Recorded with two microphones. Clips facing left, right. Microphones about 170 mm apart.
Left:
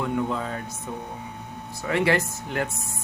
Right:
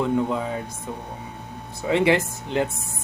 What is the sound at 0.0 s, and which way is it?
Speech, 20° right (ahead or behind).